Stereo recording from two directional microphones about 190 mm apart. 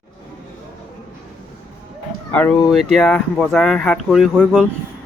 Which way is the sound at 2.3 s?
5° left (ahead or behind).